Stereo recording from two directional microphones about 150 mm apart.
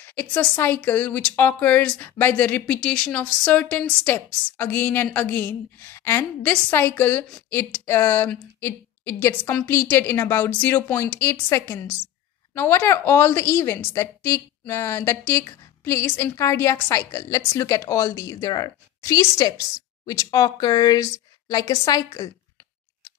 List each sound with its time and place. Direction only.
0.0 s speech: 10° left (ahead or behind)